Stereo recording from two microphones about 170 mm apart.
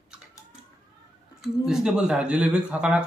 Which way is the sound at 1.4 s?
5° right (ahead or behind).